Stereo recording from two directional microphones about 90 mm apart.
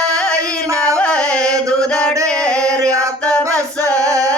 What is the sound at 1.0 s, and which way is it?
Music, 10° left (ahead or behind).